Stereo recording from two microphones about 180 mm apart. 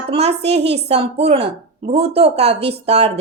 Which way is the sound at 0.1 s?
35° right (ahead or behind).